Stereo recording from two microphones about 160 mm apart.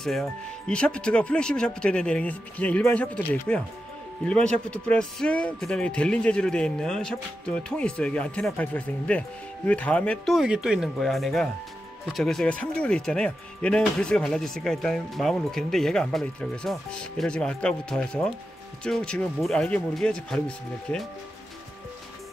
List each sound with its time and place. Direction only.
0.0 s speech: centre (ahead or behind)